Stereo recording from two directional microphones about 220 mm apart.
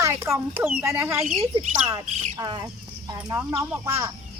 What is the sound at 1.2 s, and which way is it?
Speech, 30° right (ahead or behind).